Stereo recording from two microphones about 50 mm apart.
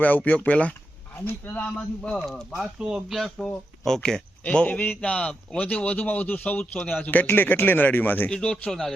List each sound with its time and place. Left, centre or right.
0.0 s speech: left; by 2.2 s centre
2.2 s speech: centre
2.6 s speech: centre
3.1 s speech: centre
4.4 s speech: left
8.3 s speech: centre